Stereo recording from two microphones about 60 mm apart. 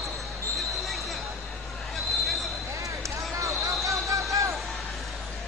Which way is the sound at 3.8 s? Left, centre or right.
Right.